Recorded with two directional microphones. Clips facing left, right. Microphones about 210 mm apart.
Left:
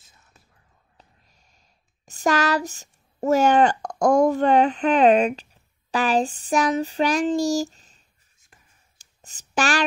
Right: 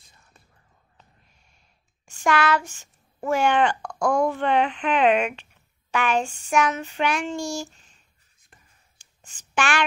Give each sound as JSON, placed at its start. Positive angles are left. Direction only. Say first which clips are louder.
{"t": 0.0, "sound": "whispering", "louder": "right 1 dB", "side_deg": 0}
{"t": 2.0, "sound": "speech", "louder": "left 1 dB", "side_deg": 40}
{"t": 8.9, "sound": "a sound", "louder": "left 4 dB", "side_deg": 40}